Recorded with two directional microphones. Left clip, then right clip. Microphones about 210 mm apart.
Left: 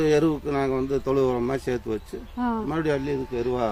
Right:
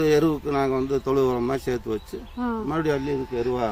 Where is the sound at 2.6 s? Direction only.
Centre (ahead or behind).